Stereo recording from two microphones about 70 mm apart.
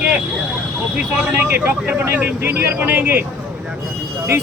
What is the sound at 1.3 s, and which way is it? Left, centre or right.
Speech, right.